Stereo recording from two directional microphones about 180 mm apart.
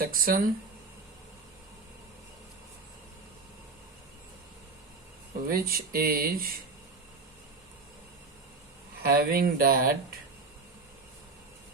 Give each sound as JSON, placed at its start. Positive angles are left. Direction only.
{"t": 0.0, "sound": "speech", "side_deg": -55}
{"t": 5.5, "sound": "speech", "side_deg": -55}
{"t": 9.0, "sound": "speech", "side_deg": -55}